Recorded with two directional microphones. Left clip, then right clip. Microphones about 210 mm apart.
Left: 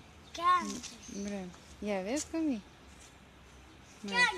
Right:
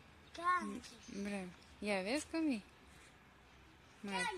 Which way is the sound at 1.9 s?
5° right (ahead or behind).